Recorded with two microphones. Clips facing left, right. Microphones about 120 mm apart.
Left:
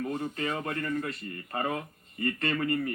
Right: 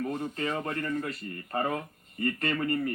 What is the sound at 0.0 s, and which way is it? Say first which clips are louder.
Speech: even; 30° right (ahead or behind).